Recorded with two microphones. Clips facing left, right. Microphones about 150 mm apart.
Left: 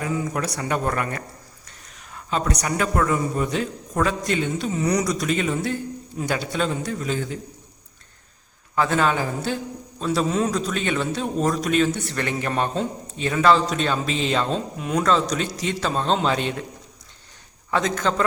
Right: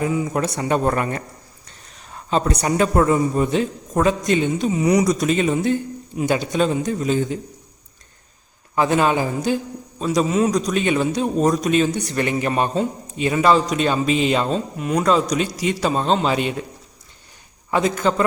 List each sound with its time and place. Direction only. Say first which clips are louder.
0.0 s a man's voice: right 4 dB; 20° right (ahead or behind)
8.7 s a man's voice: right 3 dB; 15° right (ahead or behind)
17.7 s a man's voice: right 4 dB; 10° right (ahead or behind)